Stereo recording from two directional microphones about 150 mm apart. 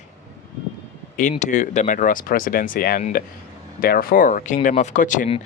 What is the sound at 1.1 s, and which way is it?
Speech, 55° left (ahead or behind).